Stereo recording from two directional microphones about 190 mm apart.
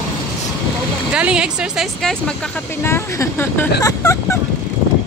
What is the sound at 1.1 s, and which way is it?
Speech, 5° right (ahead or behind).